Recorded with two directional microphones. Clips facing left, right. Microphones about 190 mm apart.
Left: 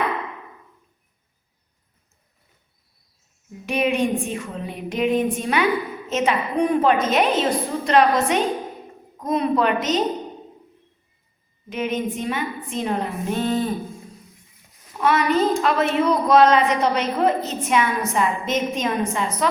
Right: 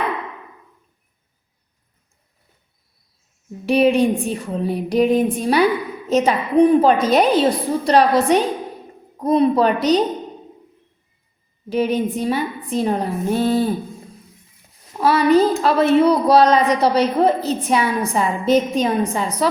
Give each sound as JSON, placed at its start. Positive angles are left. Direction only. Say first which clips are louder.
{"t": 3.7, "sound": "a woman's voice", "louder": "right 6 dB", "side_deg": -35}
{"t": 11.7, "sound": "a woman's voice", "louder": "right 6 dB", "side_deg": -35}
{"t": 15.0, "sound": "a woman's voice", "louder": "right 5 dB", "side_deg": -35}